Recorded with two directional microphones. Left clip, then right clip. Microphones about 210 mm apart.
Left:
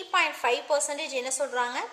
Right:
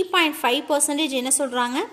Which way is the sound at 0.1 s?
40° right (ahead or behind).